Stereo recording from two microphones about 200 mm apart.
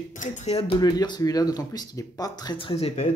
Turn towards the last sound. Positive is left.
turn(degrees=30)  # may be behind; listen again after turning